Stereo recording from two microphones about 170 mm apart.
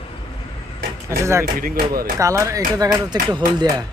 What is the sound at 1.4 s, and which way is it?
Speech, 65° right (ahead or behind).